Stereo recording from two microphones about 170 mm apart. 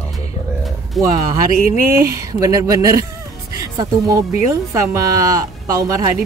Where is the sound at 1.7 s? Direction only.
15° right (ahead or behind).